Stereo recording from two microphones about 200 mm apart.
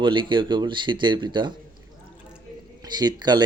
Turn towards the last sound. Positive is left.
turn(degrees=-20)  # may be behind; listen again after turning